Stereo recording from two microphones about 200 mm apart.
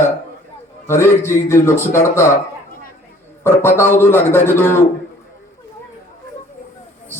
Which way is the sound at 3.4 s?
10° left (ahead or behind).